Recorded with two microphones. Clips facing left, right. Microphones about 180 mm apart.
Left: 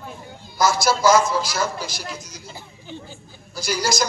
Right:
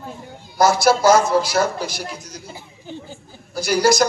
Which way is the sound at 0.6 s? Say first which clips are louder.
Right 4 dB; 60° right (ahead or behind).